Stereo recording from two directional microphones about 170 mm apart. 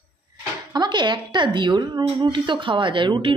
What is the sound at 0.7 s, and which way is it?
Speech, 25° right (ahead or behind).